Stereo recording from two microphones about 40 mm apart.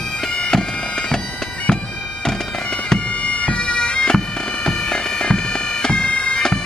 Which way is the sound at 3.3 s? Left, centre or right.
Left.